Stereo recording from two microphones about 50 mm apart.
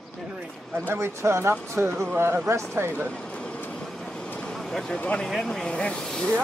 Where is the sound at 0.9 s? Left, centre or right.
Right.